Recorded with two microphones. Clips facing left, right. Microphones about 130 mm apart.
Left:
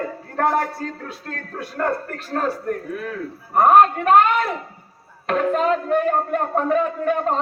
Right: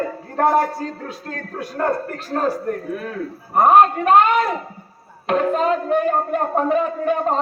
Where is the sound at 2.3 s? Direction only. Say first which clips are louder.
Right 2 dB; 25° right (ahead or behind).